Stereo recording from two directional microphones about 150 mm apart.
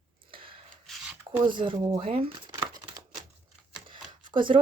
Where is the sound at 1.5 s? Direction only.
30° right (ahead or behind).